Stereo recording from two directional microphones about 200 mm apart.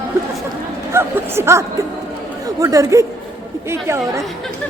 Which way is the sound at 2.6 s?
15° right (ahead or behind).